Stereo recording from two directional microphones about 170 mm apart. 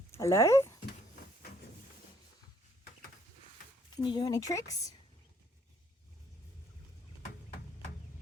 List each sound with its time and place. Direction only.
0.1 s speech: 15° left (ahead or behind)
3.9 s speech: 25° left (ahead or behind)